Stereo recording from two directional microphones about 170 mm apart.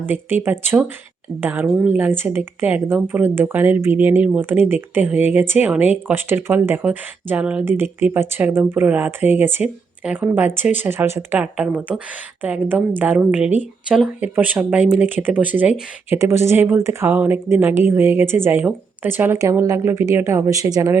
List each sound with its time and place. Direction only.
0.0 s speech: 10° right (ahead or behind)